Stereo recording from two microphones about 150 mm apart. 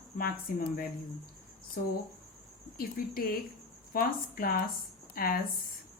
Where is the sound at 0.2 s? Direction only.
80° left.